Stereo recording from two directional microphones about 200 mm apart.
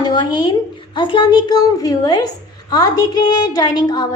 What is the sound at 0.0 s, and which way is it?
A woman's voice, 20° left (ahead or behind).